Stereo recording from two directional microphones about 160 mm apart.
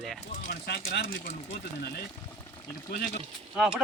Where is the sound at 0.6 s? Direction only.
85° left.